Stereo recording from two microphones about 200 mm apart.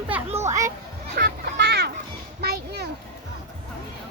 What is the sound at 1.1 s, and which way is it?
Children playing, 55° right (ahead or behind).